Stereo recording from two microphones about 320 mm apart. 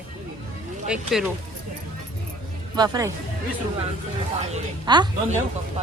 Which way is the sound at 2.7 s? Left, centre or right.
Centre.